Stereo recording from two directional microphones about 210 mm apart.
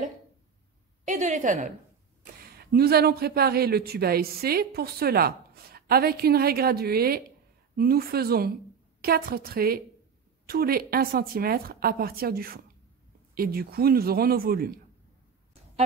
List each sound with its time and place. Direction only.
1.0 s a woman's voice: 35° right (ahead or behind)
2.5 s speech: 50° right (ahead or behind)